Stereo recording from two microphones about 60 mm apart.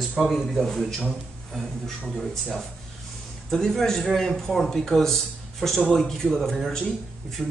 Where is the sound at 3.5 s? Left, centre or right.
Centre.